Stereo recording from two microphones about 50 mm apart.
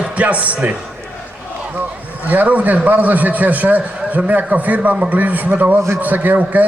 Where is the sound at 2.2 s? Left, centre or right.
Right.